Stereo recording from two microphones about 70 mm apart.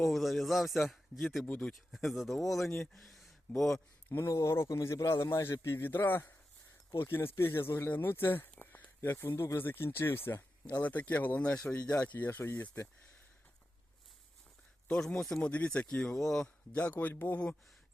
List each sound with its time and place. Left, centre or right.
0.0 s a man's voice: centre
2.9 s a sound: centre
4.1 s a man's voice: left
8.5 s a sound: left
9.6 s a man's voice: left
14.8 s speech: centre
16.1 s speech: centre
16.7 s speech: left